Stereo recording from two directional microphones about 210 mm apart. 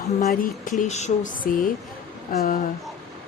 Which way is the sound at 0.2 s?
35° left (ahead or behind).